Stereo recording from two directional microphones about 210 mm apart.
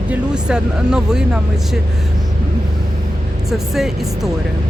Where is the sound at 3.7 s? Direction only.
Centre (ahead or behind).